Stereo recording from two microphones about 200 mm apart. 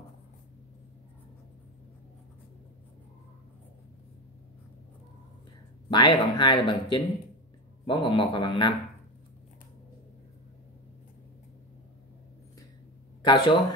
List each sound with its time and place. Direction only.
5.9 s speech: 25° left (ahead or behind)
13.2 s speech: 25° left (ahead or behind)